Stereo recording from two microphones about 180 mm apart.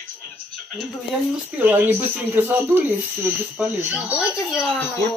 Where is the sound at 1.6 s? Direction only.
10° right (ahead or behind).